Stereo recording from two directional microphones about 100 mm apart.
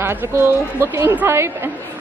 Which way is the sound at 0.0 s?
25° right (ahead or behind).